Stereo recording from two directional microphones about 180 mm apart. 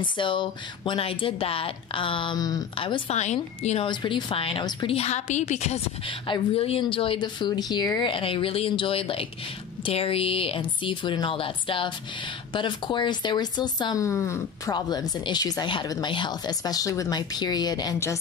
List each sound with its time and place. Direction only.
0.0 s a woman's voice: 25° left (ahead or behind)